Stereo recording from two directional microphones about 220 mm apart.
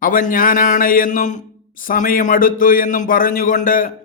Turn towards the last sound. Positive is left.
turn(degrees=40)  # may be behind; listen again after turning